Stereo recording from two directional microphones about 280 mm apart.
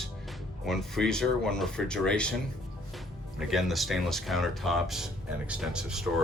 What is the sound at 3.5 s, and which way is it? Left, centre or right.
Speech, centre.